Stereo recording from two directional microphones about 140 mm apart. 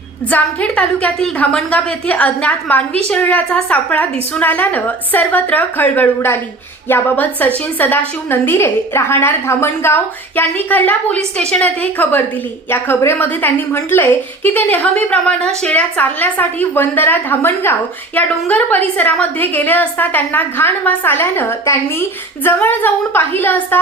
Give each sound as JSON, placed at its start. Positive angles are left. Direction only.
{"t": 0.3, "sound": "a woman's voice", "side_deg": 10}